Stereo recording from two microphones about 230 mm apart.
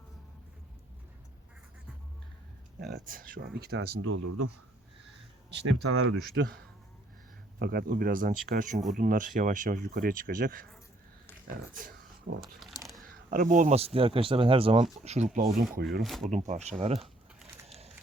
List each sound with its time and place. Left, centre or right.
2.8 s speech: right
4.0 s speech: right
7.6 s speech: right
11.7 s a sound: right
12.4 s speech: centre
13.3 s speech: right
15.9 s speech: centre
16.5 s speech: right